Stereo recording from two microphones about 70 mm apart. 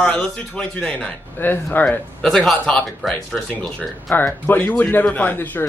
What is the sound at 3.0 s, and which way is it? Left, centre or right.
Speech, centre.